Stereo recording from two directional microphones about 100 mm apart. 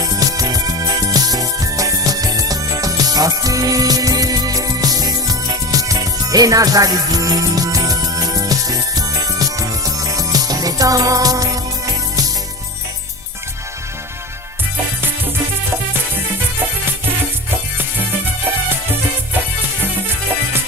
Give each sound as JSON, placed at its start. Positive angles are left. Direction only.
{"t": 0.0, "sound": "music", "side_deg": -35}